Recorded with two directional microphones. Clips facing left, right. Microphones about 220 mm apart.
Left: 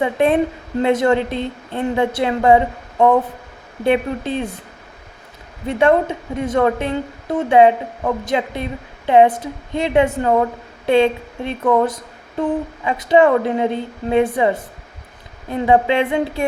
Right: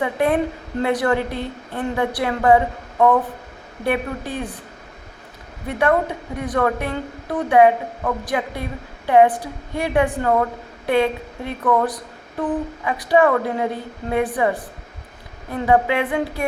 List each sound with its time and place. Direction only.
0.0 s a woman's voice: 25° left (ahead or behind)
5.6 s a woman's voice: 25° left (ahead or behind)